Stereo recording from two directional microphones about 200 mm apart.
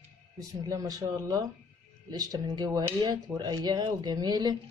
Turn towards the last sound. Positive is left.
turn(degrees=-20)  # may be behind; listen again after turning